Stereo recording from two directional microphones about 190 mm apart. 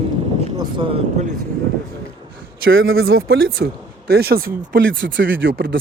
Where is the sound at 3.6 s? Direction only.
60° right (ahead or behind).